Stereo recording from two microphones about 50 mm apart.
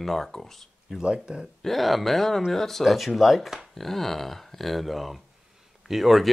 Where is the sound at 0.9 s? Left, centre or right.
Centre.